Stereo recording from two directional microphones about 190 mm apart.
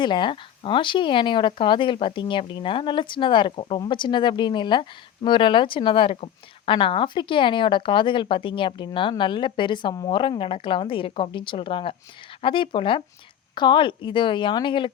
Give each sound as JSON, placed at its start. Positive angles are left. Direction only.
{"t": 0.0, "sound": "speech", "side_deg": 25}